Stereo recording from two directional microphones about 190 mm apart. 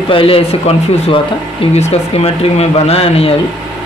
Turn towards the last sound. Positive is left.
turn(degrees=30)  # may be behind; listen again after turning